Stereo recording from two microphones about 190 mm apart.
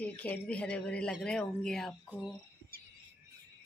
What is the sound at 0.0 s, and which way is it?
Speech, 10° left (ahead or behind).